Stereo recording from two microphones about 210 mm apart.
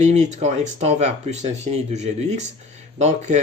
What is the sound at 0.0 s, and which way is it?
Speech, 35° right (ahead or behind).